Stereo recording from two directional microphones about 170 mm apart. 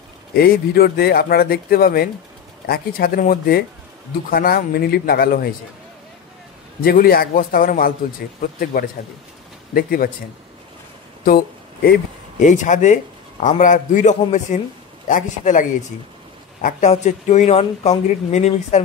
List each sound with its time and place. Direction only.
0.3 s speech: 65° left (ahead or behind)
6.8 s speech: 60° left (ahead or behind)
11.2 s speech: 60° left (ahead or behind)
12.4 s speech: 45° left (ahead or behind)
16.6 s speech: 45° left (ahead or behind)